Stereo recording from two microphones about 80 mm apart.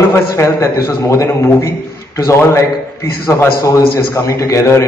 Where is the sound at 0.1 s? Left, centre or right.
Left.